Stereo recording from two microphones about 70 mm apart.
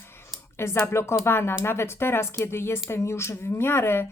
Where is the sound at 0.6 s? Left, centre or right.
Left.